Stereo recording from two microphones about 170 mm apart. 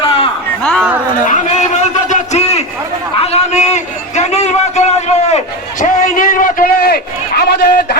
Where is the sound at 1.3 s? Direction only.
45° left (ahead or behind).